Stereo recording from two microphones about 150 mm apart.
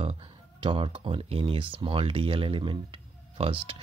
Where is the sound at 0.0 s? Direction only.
35° right (ahead or behind).